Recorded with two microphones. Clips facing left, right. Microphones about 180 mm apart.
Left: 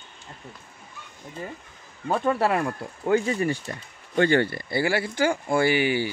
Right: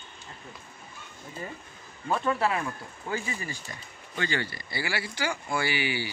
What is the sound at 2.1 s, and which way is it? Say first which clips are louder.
Speech: left 4 dB; 50° left (ahead or behind).